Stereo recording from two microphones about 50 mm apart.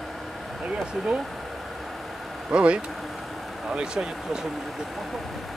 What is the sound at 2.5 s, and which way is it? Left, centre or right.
Speech, right.